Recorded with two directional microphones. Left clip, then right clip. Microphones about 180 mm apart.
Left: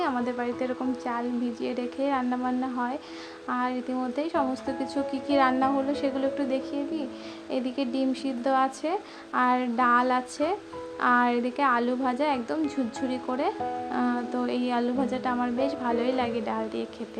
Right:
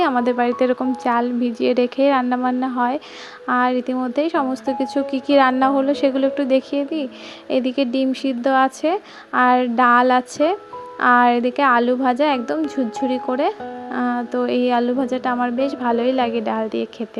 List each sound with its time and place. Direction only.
0.0 s speech: 35° right (ahead or behind)